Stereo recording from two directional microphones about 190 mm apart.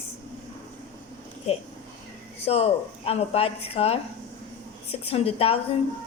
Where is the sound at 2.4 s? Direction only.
35° left (ahead or behind).